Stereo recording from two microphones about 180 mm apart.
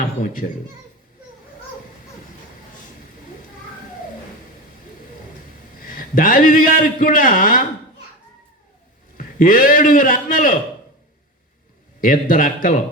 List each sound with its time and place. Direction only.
5.8 s a man's voice: 50° left (ahead or behind)
9.1 s a man's voice: 50° left (ahead or behind)
11.9 s a man's voice: 50° left (ahead or behind)